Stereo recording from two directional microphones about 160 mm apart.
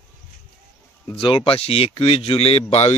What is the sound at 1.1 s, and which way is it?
Speech, 35° left (ahead or behind).